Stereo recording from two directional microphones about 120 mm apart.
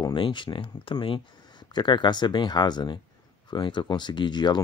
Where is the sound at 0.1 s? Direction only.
40° left (ahead or behind).